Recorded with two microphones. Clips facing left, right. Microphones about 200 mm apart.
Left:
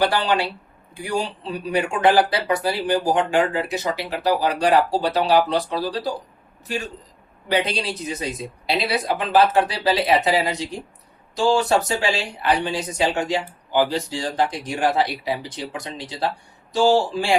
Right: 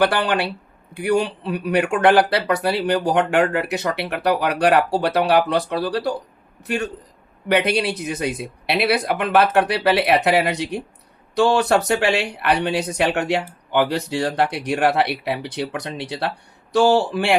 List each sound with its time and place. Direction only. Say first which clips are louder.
0.0 s speech: right 1 dB; 60° right (ahead or behind)
7.4 s speech: right 4 dB; 60° right (ahead or behind)